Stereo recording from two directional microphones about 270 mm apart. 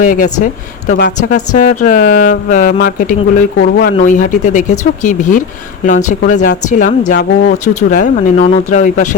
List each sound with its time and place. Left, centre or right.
0.0 s speech: left
0.9 s speech: left
1.3 s speech: left